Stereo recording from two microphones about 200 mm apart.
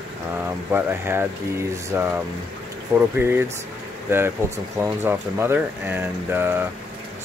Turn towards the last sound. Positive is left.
turn(degrees=-10)  # may be behind; listen again after turning